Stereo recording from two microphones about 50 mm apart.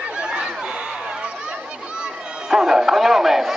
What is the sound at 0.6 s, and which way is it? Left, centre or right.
Chatter, centre.